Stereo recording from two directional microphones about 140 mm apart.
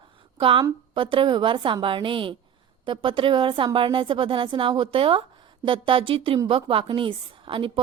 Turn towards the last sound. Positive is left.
turn(degrees=-40)  # may be behind; listen again after turning